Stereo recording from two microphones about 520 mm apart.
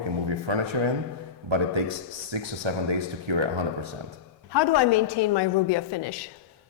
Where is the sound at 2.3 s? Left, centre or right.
Right.